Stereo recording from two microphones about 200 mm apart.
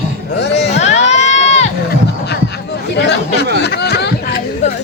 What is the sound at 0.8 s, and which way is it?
Crowd, 35° left (ahead or behind).